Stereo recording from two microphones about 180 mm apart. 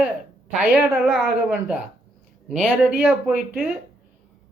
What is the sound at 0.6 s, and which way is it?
Speech, 5° right (ahead or behind).